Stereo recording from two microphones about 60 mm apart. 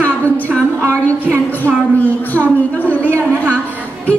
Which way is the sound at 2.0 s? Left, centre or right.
Left.